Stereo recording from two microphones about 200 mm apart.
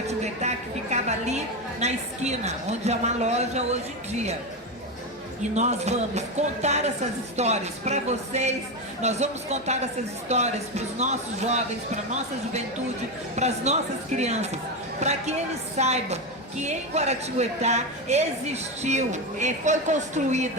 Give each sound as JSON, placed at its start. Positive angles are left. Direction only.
{"t": 0.1, "sound": "a sound", "side_deg": -35}
{"t": 1.8, "sound": "a woman's voice", "side_deg": -35}
{"t": 5.4, "sound": "a woman's voice", "side_deg": -35}
{"t": 13.3, "sound": "a woman's voice", "side_deg": -35}